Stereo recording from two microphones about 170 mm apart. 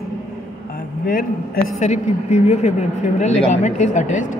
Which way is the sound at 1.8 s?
45° left (ahead or behind).